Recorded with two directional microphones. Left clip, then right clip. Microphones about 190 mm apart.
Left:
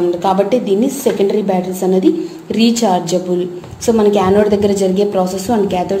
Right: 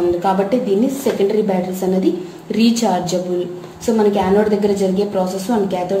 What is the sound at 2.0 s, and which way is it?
Speech, 25° left (ahead or behind).